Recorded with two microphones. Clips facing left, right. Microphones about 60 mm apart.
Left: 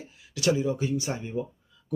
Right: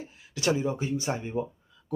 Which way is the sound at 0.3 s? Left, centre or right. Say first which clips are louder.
Left 2 dB; right.